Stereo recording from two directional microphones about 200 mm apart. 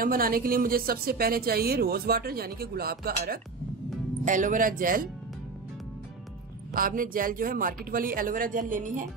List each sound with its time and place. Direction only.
0.0 s a woman's voice: 45° right (ahead or behind)
6.7 s a woman's voice: 45° right (ahead or behind)